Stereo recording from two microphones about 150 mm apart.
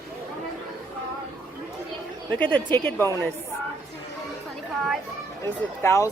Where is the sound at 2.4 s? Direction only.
10° left (ahead or behind).